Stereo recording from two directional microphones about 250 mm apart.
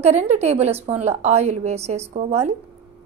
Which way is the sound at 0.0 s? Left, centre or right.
Right.